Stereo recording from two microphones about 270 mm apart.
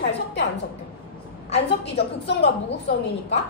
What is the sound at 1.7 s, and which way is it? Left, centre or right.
Speech, left.